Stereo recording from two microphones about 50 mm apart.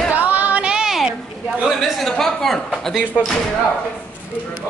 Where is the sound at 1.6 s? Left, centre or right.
Centre.